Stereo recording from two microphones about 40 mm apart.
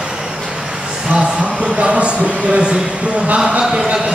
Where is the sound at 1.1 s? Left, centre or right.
Right.